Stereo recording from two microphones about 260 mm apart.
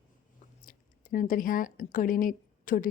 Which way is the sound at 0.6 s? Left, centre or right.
Left.